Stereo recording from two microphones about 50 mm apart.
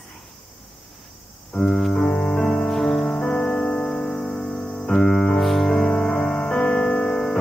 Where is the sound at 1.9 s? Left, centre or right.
Left.